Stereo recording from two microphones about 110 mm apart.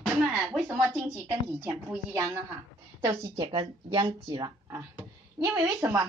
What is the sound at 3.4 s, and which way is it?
Speech, 50° right (ahead or behind).